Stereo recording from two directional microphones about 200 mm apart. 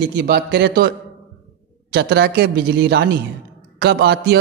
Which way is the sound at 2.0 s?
50° right (ahead or behind).